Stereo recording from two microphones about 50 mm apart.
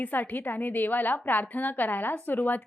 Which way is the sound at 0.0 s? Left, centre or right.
Left.